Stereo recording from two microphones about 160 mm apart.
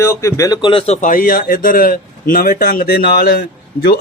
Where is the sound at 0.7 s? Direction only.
40° left (ahead or behind).